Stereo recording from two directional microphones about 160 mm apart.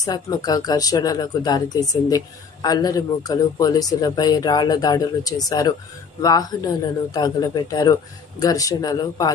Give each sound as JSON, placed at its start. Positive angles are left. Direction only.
{"t": 0.0, "sound": "speech", "side_deg": 25}